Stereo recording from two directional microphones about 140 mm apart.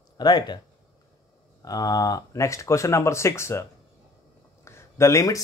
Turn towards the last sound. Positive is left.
turn(degrees=20)  # may be behind; listen again after turning